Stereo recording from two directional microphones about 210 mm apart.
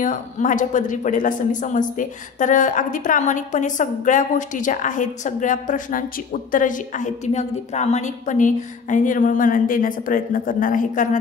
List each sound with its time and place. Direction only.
0.0 s speech: 40° left (ahead or behind)